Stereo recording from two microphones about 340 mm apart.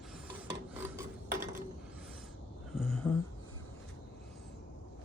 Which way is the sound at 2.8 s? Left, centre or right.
Centre.